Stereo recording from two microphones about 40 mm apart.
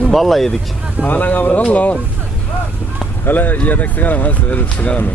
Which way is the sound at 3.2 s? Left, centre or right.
Left.